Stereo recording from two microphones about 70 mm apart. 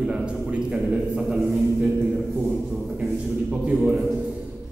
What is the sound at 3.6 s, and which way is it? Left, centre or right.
Speech, centre.